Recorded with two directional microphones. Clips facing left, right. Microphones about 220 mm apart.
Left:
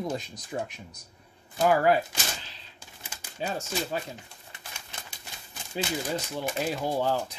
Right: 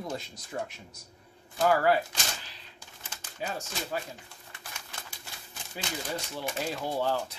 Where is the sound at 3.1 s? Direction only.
10° left (ahead or behind).